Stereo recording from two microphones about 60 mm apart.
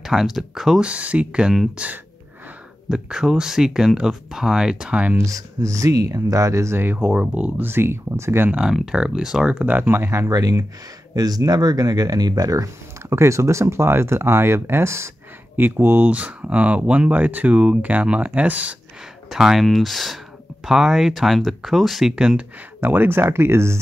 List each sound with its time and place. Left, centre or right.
0.0 s speech: centre
0.8 s speech: right
5.1 s speech: right
7.0 s speech: centre
7.6 s speech: right
8.9 s speech: centre
9.7 s speech: right
10.3 s speech: right
13.1 s speech: right
15.5 s speech: right
19.3 s speech: centre
22.1 s speech: centre
22.8 s speech: right